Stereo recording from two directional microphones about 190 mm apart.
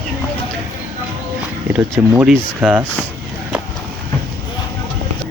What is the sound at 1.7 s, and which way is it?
Speech, 10° right (ahead or behind).